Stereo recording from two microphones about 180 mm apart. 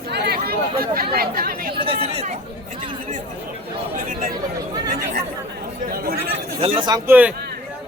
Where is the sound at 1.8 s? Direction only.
30° right (ahead or behind).